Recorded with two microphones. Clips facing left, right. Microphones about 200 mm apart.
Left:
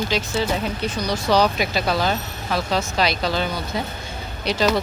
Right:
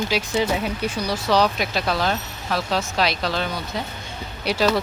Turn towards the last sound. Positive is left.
turn(degrees=-10)  # may be behind; listen again after turning